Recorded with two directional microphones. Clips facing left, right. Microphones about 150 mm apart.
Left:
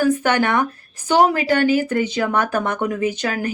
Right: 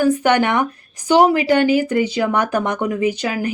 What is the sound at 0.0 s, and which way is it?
Speech, 15° right (ahead or behind).